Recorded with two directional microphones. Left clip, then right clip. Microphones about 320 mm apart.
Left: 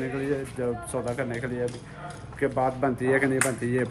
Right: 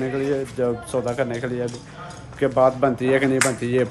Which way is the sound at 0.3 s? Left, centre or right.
Centre.